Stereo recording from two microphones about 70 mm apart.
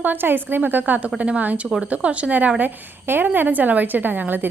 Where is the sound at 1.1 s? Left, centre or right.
Centre.